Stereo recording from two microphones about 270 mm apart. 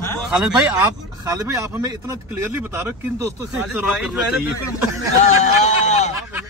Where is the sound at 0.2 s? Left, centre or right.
Centre.